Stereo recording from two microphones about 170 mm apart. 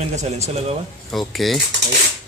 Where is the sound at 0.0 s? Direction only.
40° right (ahead or behind).